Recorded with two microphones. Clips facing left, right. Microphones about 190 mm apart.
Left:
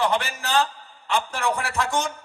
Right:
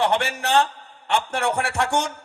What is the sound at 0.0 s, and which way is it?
A man's voice, 65° right (ahead or behind).